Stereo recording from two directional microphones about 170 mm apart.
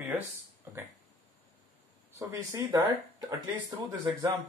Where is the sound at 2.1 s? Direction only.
15° right (ahead or behind).